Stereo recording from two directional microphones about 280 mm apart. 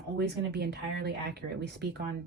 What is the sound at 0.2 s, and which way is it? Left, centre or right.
Speech, right.